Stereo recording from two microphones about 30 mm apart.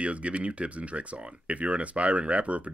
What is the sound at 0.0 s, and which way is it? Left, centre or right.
Speech, right.